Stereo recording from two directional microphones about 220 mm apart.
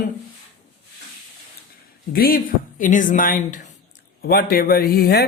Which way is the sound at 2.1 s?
40° left (ahead or behind).